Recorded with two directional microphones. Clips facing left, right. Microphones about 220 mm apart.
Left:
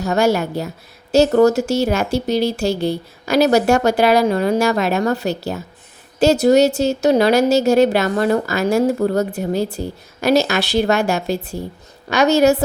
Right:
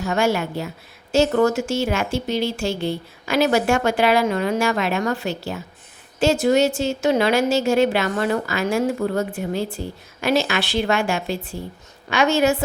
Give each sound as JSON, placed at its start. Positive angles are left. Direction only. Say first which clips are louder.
{"t": 0.0, "sound": "speech", "louder": "left 4 dB", "side_deg": 40}